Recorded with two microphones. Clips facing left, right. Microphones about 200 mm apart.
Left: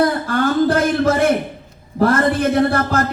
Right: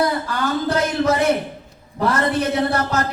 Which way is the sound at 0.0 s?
50° left (ahead or behind).